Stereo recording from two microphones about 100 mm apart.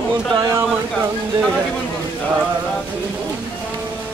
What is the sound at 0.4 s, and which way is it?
Speech, 30° right (ahead or behind).